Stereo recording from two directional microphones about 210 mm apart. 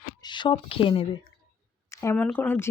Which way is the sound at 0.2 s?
20° left (ahead or behind).